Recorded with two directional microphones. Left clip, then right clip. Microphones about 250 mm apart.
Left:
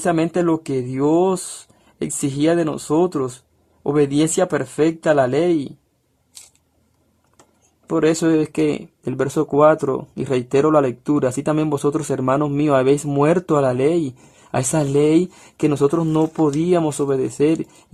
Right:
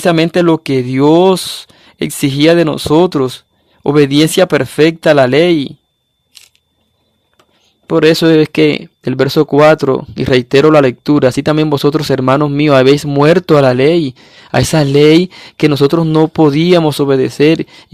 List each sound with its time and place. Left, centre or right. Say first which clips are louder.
0.0 s speech: right 8 dB; right
7.9 s speech: right 9 dB; right